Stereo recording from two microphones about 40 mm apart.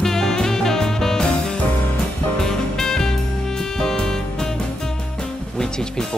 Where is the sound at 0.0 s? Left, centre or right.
Centre.